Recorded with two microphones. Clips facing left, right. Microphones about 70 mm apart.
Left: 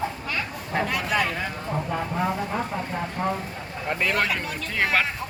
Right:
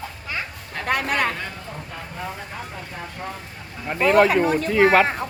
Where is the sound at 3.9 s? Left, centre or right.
Centre.